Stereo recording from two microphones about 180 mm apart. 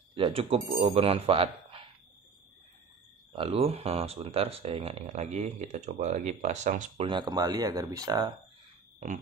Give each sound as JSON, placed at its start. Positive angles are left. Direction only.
{"t": 0.1, "sound": "speech", "side_deg": -30}
{"t": 3.3, "sound": "speech", "side_deg": -35}
{"t": 7.1, "sound": "speech", "side_deg": -25}